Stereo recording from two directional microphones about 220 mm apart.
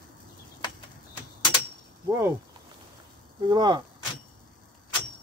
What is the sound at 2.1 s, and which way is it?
Speech, 10° right (ahead or behind).